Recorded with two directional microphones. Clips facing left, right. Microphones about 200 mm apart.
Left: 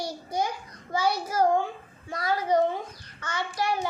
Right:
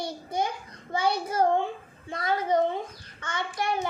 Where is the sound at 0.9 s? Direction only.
25° right (ahead or behind).